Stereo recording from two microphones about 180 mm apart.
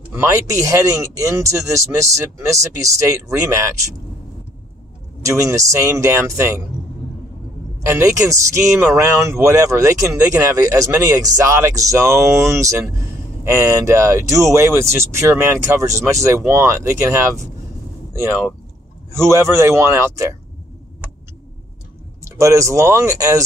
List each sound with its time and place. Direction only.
0.1 s speech: 15° right (ahead or behind)
5.2 s speech: 15° right (ahead or behind)
7.8 s speech: 15° right (ahead or behind)
19.1 s speech: 15° right (ahead or behind)
22.2 s speech: 15° right (ahead or behind)